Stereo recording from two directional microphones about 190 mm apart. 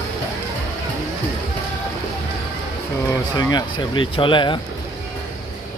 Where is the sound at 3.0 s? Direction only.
20° left (ahead or behind).